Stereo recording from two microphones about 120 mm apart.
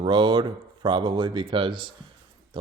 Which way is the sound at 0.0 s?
40° right (ahead or behind).